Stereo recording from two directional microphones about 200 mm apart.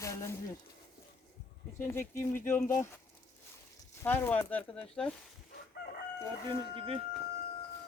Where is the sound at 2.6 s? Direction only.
40° left (ahead or behind).